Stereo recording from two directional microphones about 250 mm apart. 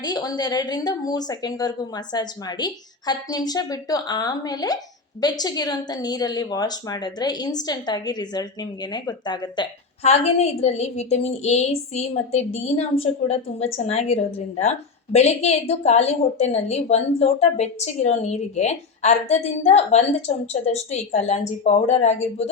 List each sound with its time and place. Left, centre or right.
0.0 s a woman's voice: centre